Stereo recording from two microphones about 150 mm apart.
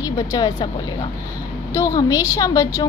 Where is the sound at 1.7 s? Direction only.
20° left (ahead or behind).